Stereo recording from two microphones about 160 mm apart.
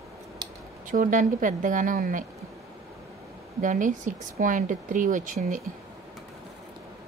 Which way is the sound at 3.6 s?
55° right (ahead or behind).